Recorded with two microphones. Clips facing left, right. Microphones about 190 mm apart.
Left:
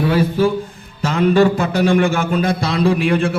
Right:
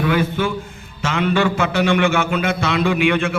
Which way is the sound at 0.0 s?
35° left (ahead or behind).